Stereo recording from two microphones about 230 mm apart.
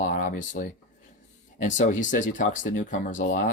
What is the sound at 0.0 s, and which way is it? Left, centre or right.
Speech, left.